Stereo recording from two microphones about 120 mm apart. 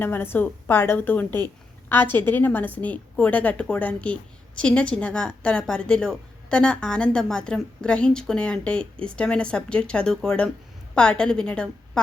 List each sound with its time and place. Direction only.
0.0 s a woman's voice: 20° left (ahead or behind)